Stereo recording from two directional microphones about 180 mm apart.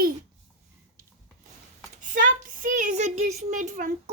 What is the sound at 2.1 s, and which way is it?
A child's voice, 45° right (ahead or behind).